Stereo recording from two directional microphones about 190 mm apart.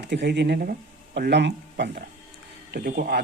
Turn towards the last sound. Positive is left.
turn(degrees=-50)  # may be behind; listen again after turning